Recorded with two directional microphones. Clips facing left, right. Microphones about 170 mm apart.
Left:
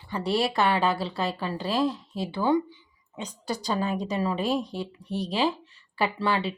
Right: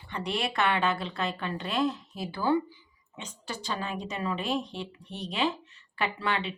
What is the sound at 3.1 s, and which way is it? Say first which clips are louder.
A woman's voice: left 7 dB; 35° left (ahead or behind).